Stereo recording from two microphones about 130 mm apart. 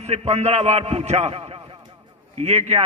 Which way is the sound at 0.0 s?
55° right (ahead or behind).